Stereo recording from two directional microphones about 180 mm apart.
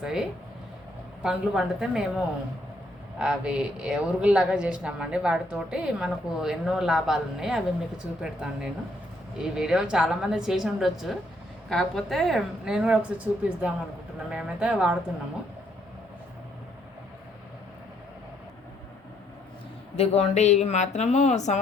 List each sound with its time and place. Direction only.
0.0 s a woman's voice: 5° right (ahead or behind)
20.0 s speech: 35° left (ahead or behind)